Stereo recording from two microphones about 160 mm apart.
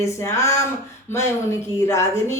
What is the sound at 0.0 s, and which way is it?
Speech, 20° left (ahead or behind).